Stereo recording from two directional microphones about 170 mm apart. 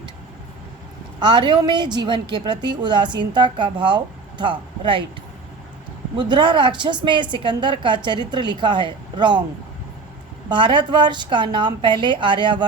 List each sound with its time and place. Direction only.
1.2 s a woman's voice: 25° right (ahead or behind)
6.1 s a woman's voice: 25° right (ahead or behind)
10.5 s a woman's voice: 25° right (ahead or behind)